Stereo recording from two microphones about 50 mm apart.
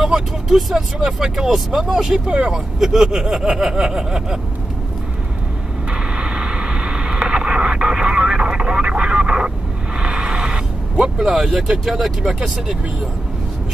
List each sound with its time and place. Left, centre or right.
0.0 s speech: centre
2.2 s speech: right
2.5 s speech: centre
5.9 s vehicle: centre
9.9 s a sound: centre
11.1 s speech: centre